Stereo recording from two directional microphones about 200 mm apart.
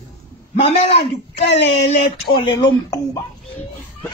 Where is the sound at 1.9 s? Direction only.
25° left (ahead or behind).